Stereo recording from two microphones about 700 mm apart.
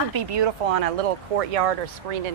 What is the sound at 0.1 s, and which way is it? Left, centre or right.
Speech, right.